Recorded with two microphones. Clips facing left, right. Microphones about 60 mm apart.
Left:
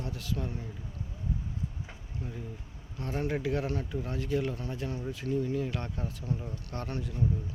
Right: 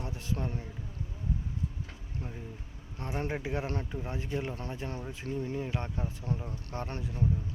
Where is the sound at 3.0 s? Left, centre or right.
Right.